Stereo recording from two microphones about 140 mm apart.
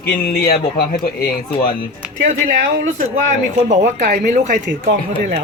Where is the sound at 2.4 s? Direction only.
75° right (ahead or behind).